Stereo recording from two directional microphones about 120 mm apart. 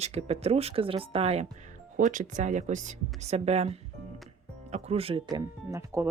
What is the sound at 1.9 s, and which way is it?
Speech, 90° right.